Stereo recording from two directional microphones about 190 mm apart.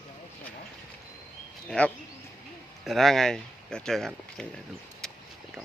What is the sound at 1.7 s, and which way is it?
Speech, 5° left (ahead or behind).